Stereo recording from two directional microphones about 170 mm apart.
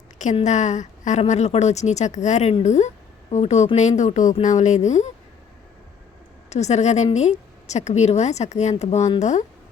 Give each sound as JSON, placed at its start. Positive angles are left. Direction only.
{"t": 0.3, "sound": "a woman's voice", "side_deg": 45}
{"t": 6.5, "sound": "speech", "side_deg": 40}